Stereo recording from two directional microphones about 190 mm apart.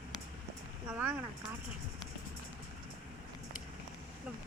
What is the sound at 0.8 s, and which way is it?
Speech, 10° right (ahead or behind).